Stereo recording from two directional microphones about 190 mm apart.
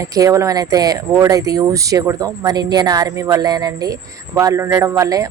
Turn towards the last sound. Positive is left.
turn(degrees=-20)  # may be behind; listen again after turning